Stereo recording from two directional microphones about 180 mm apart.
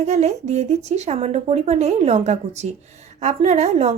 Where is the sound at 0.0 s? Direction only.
40° right (ahead or behind).